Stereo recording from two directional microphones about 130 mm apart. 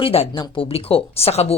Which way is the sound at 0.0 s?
50° left (ahead or behind).